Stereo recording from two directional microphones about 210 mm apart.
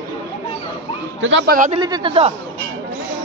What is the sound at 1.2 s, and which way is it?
Speech, 60° right (ahead or behind).